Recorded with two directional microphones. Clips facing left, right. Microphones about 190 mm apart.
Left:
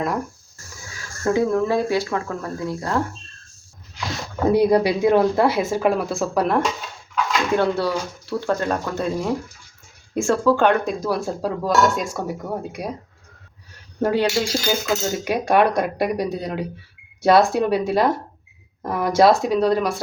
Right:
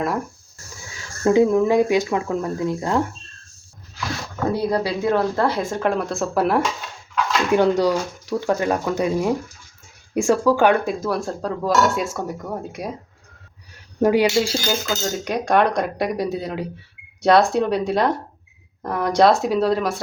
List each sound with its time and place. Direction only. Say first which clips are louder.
1.2 s speech: right 4 dB; 20° right (ahead or behind)
4.5 s speech: left 7 dB; 15° left (ahead or behind); by 6.6 s centre (ahead or behind)
7.5 s speech: right 4 dB; 15° right (ahead or behind); by 12.9 s centre (ahead or behind)
14.0 s speech: right 3 dB; 10° right (ahead or behind)
14.7 s speech: left 2 dB; 5° left (ahead or behind)